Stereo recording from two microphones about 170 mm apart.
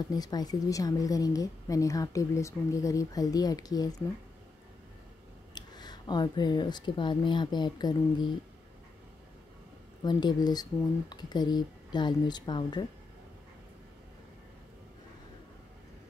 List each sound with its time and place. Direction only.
0.1 s a woman's voice: 20° left (ahead or behind)
5.5 s speech: 25° left (ahead or behind)
10.0 s a woman's voice: 25° left (ahead or behind)